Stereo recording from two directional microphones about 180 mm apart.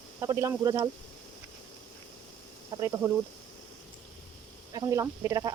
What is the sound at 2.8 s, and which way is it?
Speech, 15° right (ahead or behind).